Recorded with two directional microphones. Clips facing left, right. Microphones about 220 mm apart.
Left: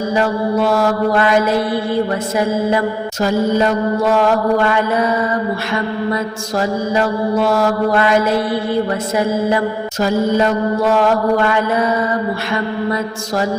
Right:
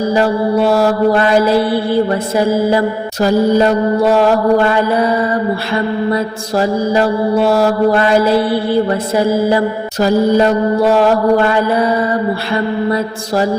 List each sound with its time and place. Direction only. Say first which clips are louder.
0.1 s mantra: right 2 dB; 30° right (ahead or behind)